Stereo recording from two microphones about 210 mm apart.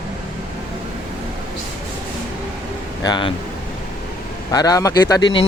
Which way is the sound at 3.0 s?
20° left (ahead or behind).